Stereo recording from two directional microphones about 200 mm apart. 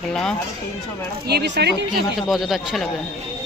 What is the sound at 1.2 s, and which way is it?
Speech, 55° right (ahead or behind).